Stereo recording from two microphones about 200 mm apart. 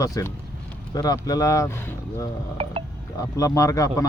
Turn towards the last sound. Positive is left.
turn(degrees=15)  # may be behind; listen again after turning